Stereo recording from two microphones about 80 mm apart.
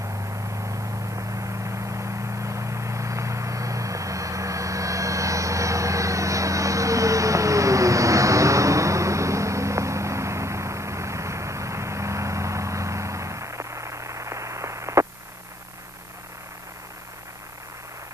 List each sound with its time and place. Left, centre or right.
0.6 s vehicle: right